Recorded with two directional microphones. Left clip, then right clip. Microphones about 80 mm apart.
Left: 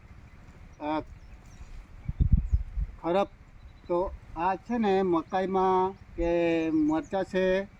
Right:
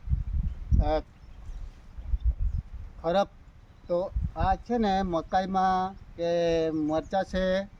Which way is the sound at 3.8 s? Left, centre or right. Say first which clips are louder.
Even; right.